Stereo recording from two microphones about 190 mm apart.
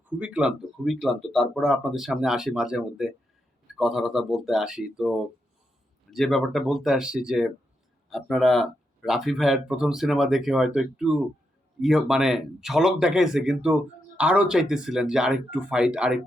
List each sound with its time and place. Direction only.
0.2 s speech: 5° right (ahead or behind)